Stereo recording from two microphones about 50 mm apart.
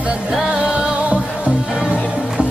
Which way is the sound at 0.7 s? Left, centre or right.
Right.